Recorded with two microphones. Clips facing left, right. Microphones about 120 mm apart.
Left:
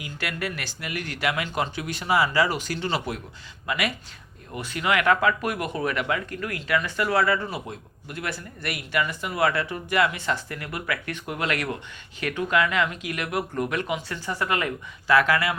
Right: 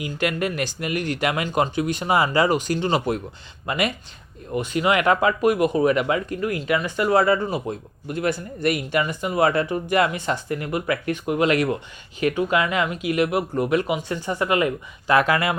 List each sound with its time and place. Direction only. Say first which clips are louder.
0.0 s speech: right 7 dB; 20° right (ahead or behind)
7.7 s speech: right 8 dB; 30° right (ahead or behind)
9.9 s speech: right 2 dB; 35° right (ahead or behind)
10.2 s speech: right 4 dB; 20° right (ahead or behind)